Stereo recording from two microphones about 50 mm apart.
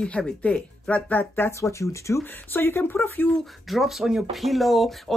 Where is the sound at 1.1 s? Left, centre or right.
Left.